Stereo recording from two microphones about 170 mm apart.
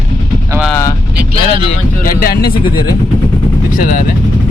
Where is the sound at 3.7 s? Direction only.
50° left (ahead or behind).